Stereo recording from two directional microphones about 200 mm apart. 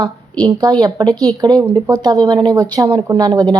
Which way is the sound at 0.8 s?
20° right (ahead or behind).